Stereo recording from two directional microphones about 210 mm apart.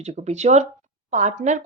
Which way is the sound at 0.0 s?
30° right (ahead or behind).